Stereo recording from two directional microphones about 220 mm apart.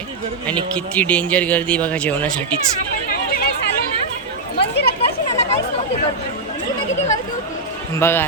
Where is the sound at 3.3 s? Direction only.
45° left (ahead or behind).